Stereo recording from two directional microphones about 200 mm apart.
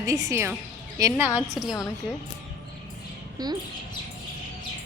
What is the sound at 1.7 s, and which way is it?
Speech, 15° left (ahead or behind).